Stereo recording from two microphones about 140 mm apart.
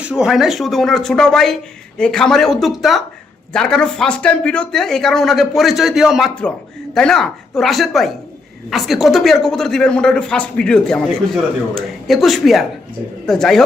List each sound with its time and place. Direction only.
0.0 s speech: 5° right (ahead or behind)